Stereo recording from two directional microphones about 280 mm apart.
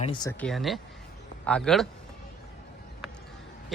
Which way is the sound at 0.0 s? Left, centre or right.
Centre.